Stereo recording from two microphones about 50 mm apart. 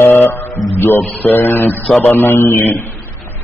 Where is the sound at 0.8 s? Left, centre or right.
Left.